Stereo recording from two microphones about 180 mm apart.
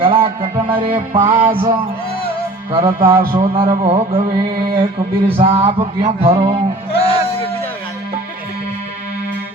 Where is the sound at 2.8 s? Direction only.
15° right (ahead or behind).